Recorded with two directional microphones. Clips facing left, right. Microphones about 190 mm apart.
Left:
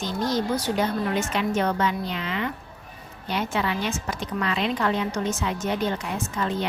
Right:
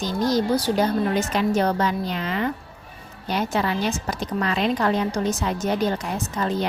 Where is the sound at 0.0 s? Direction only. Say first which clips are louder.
Right 4 dB; 40° right (ahead or behind).